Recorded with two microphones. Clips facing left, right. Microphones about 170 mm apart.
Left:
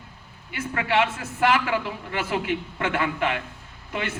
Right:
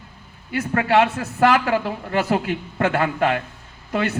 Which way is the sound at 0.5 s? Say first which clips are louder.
Right 6 dB; 45° right (ahead or behind).